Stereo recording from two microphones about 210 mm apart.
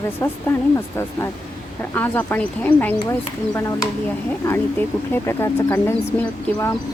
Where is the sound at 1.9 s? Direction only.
10° left (ahead or behind).